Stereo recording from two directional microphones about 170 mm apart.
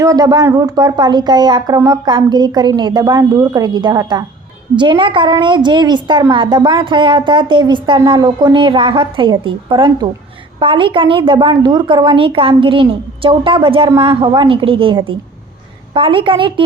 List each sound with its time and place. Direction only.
0.0 s a woman's voice: 20° right (ahead or behind)